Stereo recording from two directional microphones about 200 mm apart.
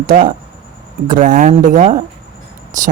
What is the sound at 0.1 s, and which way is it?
Speech, 45° right (ahead or behind).